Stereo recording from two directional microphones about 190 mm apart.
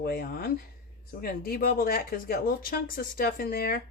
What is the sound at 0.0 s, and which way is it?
Speech, 50° left (ahead or behind).